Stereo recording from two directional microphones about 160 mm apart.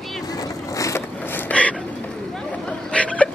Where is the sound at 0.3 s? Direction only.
20° left (ahead or behind).